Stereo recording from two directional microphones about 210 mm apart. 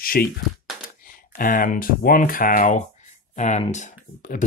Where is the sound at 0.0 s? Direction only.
45° left (ahead or behind).